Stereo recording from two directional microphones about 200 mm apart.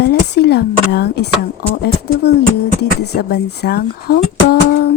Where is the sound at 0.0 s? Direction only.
55° left (ahead or behind).